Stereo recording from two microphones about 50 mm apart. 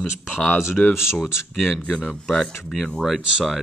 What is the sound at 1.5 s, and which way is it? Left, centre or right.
Speech, centre.